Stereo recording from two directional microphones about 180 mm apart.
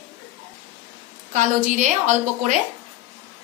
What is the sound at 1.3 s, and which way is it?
A woman's voice, 45° right (ahead or behind).